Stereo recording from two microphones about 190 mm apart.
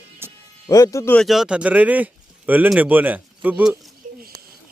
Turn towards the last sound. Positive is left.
turn(degrees=-5)  # may be behind; listen again after turning